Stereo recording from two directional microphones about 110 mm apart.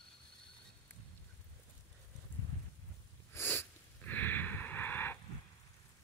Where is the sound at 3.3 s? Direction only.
20° left (ahead or behind).